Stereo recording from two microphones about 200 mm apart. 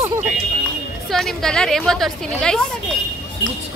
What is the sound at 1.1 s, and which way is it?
Speech, centre (ahead or behind).